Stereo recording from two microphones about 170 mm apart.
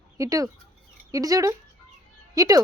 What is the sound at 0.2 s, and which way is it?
A woman's voice, 20° right (ahead or behind).